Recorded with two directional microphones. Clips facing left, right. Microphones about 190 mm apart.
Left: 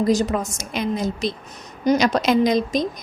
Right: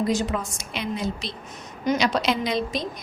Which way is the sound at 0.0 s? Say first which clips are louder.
Left 5 dB; 40° left (ahead or behind).